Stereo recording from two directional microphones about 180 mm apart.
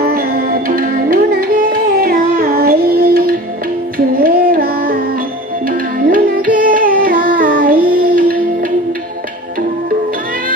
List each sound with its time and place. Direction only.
0.0 s music: 55° right (ahead or behind)
7.2 s child singing: 50° right (ahead or behind)
8.0 s music: 55° right (ahead or behind)